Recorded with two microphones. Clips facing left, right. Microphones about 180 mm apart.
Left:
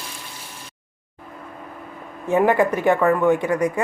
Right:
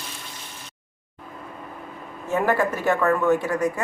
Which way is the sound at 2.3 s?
15° left (ahead or behind).